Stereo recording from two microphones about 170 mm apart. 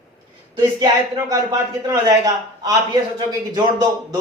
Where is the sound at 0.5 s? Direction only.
20° right (ahead or behind).